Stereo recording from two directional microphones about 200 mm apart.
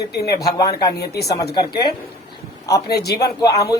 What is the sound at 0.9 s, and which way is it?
Speech, 55° left (ahead or behind).